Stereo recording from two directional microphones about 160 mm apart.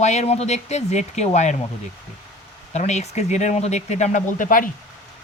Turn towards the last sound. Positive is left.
turn(degrees=60)  # may be behind; listen again after turning